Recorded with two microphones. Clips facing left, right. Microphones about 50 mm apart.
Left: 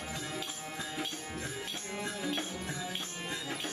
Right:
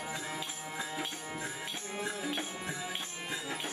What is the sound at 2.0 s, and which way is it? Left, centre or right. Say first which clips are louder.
Music: even; centre.